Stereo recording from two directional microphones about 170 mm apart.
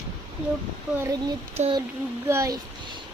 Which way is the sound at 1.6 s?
40° right (ahead or behind).